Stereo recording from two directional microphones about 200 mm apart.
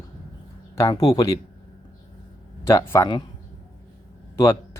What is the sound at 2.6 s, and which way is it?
Speech, 10° left (ahead or behind).